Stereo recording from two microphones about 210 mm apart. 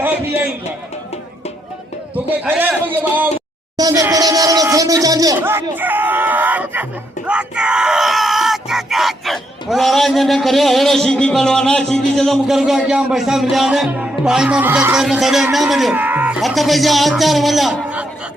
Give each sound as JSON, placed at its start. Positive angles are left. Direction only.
{"t": 2.1, "sound": "a man's voice", "side_deg": -5}
{"t": 3.8, "sound": "a sound", "side_deg": -15}
{"t": 7.3, "sound": "speech", "side_deg": -5}